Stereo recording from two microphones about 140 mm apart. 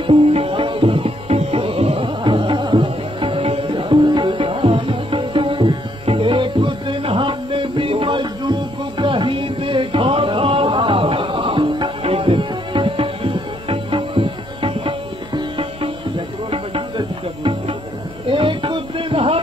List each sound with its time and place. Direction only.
0.0 s music: 40° right (ahead or behind)